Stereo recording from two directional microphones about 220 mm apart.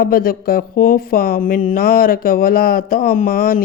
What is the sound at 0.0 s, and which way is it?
Speech, 40° left (ahead or behind).